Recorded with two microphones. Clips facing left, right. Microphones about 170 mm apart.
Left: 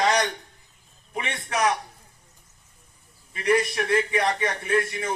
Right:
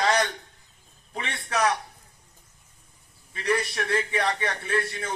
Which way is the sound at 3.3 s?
20° left (ahead or behind).